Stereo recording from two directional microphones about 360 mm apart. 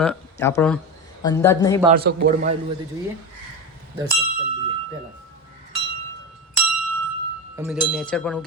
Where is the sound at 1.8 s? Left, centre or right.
Right.